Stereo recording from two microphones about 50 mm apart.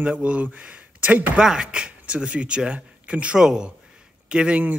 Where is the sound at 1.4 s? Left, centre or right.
Centre.